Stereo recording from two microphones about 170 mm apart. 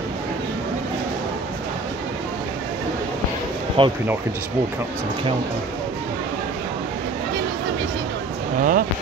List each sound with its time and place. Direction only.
3.8 s speech: 30° right (ahead or behind)
8.5 s speech: 55° right (ahead or behind)